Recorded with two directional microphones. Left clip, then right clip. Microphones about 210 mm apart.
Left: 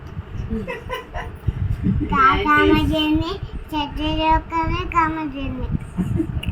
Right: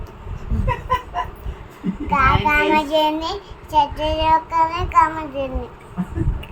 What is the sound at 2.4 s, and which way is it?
Child singing, 15° right (ahead or behind).